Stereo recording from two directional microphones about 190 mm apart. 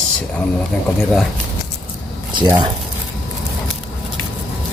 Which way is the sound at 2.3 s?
20° right (ahead or behind).